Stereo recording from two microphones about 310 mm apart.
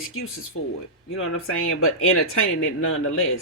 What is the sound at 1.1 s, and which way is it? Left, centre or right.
Speech, left.